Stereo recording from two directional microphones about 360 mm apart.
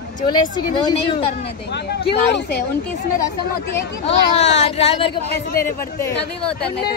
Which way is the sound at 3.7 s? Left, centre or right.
Centre.